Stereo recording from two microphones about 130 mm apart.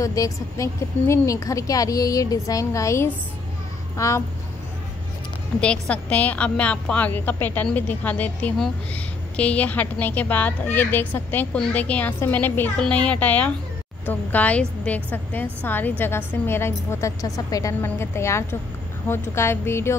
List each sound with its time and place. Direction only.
0.0 s a woman's voice: 25° left (ahead or behind)
5.6 s a woman's voice: 10° left (ahead or behind)